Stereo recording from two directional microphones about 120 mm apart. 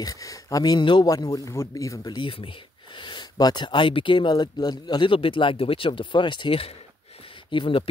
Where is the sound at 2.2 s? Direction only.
45° left (ahead or behind).